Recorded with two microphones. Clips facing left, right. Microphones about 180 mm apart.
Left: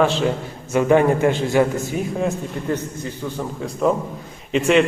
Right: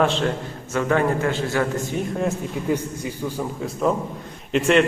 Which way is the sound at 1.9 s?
Centre (ahead or behind).